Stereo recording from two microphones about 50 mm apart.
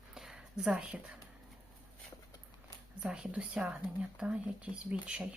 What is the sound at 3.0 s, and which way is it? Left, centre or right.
Speech, centre.